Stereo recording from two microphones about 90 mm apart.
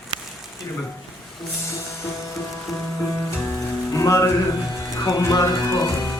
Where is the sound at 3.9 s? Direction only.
35° left (ahead or behind).